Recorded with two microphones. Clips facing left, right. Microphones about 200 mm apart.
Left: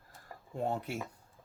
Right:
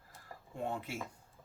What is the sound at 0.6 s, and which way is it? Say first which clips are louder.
Speech: left 4 dB; 40° left (ahead or behind).